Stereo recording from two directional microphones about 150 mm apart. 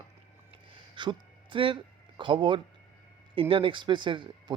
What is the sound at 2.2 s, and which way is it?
Speech, 35° right (ahead or behind).